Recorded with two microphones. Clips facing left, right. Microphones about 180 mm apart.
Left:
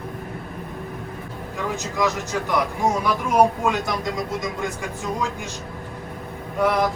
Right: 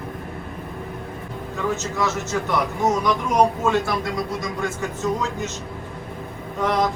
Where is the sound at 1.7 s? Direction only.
15° left (ahead or behind).